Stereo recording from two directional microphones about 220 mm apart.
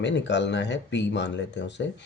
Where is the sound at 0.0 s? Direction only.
55° left (ahead or behind).